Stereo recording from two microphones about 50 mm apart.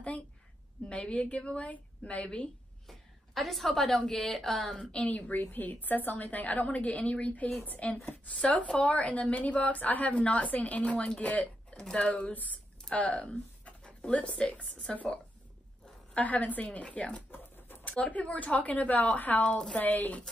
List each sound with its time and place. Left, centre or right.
0.8 s speech: left
2.9 s a woman's voice: centre
4.9 s speech: left
5.4 s a woman's voice: left
8.3 s speech: left
11.7 s speech: centre
12.1 s speech: left
16.2 s a woman's voice: left